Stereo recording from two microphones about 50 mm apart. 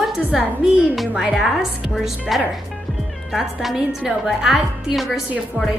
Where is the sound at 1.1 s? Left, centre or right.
Centre.